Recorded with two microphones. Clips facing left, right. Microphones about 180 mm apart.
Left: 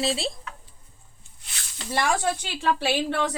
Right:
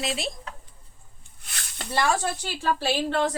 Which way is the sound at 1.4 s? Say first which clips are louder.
Right 3 dB; 55° right (ahead or behind).